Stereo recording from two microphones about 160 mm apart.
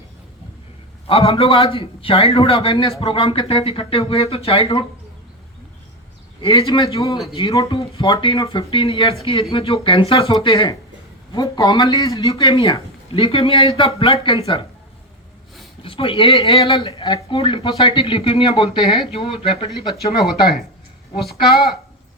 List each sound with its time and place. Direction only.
1.0 s speech: 35° left (ahead or behind)
6.6 s speech: 25° left (ahead or behind)
12.2 s speech: 35° left (ahead or behind)
15.8 s speech: 35° left (ahead or behind)
20.1 s speech: 75° left (ahead or behind)